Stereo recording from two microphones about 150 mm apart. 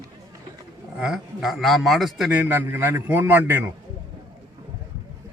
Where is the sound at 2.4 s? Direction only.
15° right (ahead or behind).